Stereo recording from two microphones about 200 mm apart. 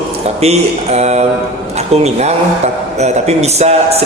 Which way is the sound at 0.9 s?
35° right (ahead or behind).